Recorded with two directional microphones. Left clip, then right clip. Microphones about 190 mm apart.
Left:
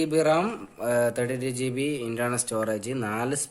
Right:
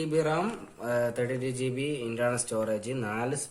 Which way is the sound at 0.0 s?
50° left (ahead or behind).